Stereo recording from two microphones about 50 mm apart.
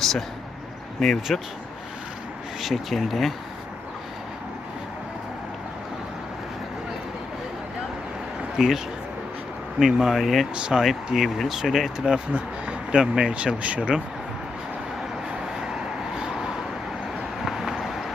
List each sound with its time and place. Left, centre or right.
0.0 s speech: centre
2.6 s speech: centre
8.5 s speech: centre
9.8 s speech: centre
10.5 s speech: centre
12.0 s speech: right
15.7 s vehicle: centre
17.4 s a sound: centre